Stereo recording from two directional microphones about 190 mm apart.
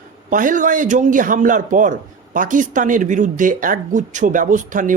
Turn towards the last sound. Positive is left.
turn(degrees=-45)  # may be behind; listen again after turning